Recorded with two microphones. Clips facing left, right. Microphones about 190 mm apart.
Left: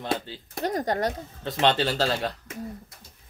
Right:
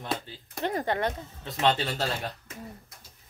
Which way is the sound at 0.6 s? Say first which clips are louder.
Left 2 dB; 40° left (ahead or behind).